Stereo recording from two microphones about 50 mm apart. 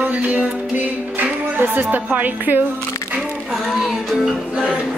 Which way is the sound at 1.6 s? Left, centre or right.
Right.